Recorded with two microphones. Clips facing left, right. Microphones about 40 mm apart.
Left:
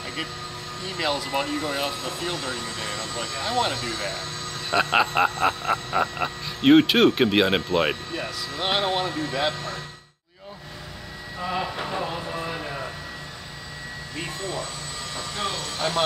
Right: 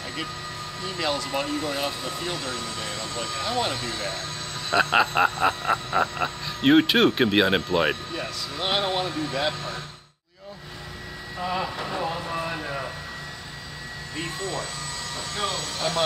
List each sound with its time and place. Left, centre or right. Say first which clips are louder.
0.8 s speech: left 1 dB; centre
2.4 s speech: left 1 dB; centre
4.9 s speech: left 1 dB; centre
11.7 s speech: left 1 dB; centre
12.0 s vehicle: right 1 dB; centre
15.5 s speech: left 1 dB; centre